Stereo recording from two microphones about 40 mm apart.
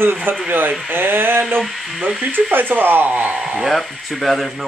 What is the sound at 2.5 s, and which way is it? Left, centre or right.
Speech, right.